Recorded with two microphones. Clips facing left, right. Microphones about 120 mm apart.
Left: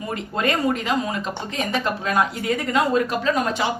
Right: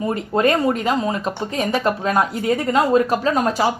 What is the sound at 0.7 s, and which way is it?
A woman's voice, 35° right (ahead or behind).